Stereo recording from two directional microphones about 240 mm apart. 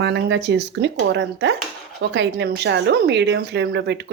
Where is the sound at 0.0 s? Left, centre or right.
Right.